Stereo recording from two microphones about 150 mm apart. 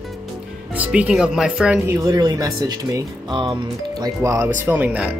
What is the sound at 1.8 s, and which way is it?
Speech, 20° right (ahead or behind).